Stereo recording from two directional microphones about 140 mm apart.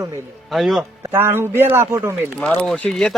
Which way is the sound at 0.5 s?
Centre (ahead or behind).